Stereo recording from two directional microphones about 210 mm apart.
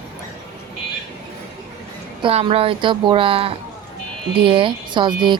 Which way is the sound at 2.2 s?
25° right (ahead or behind).